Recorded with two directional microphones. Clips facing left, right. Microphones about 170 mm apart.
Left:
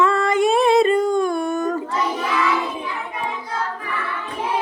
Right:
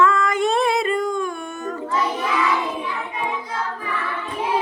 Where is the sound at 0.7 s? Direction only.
25° left (ahead or behind).